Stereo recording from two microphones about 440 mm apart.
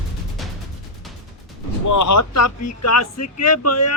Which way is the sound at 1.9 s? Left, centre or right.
Left.